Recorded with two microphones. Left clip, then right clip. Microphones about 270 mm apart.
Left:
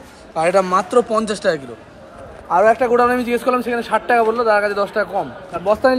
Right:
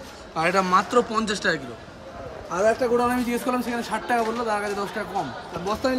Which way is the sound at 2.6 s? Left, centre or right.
Left.